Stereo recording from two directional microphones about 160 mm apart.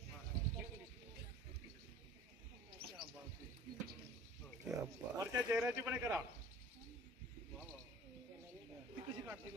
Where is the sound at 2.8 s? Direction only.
85° right.